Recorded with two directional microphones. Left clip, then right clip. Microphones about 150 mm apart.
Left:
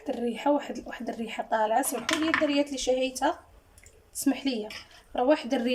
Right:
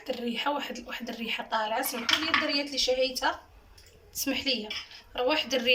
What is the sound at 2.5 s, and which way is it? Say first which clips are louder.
A woman's voice: left 1 dB; 70° left (ahead or behind).